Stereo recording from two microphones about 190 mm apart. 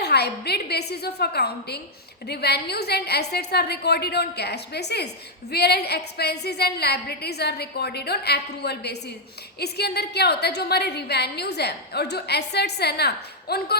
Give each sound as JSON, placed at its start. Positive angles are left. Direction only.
{"t": 0.0, "sound": "a woman's voice", "side_deg": 60}